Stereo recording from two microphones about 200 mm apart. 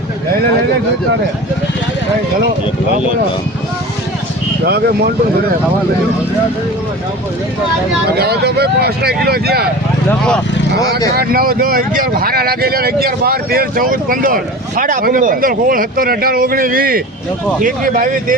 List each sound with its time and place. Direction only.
4.6 s speech: 55° right (ahead or behind)
8.2 s speech: 55° right (ahead or behind)
11.1 s speech: 50° right (ahead or behind)